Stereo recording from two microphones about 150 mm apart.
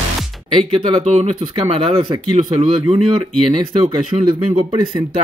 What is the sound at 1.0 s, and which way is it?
Speech, 50° right (ahead or behind).